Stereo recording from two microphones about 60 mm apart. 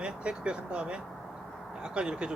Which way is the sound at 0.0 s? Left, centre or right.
Centre.